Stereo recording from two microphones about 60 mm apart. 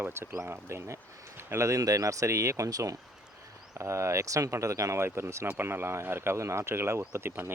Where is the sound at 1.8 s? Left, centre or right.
Right.